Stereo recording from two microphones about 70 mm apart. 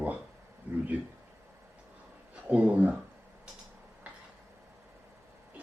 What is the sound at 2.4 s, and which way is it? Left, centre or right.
Speech, right.